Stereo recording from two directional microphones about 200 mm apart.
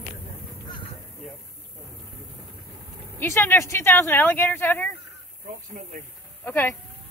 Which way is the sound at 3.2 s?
10° left (ahead or behind).